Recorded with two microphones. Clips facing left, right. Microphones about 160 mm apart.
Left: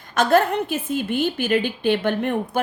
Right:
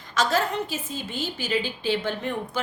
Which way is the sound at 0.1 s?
55° left (ahead or behind).